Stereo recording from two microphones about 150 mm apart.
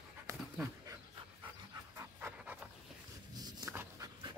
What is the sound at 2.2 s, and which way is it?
Pant, 10° right (ahead or behind).